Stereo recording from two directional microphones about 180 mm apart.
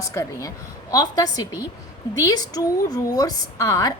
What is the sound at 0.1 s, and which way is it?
A woman's voice, 15° left (ahead or behind).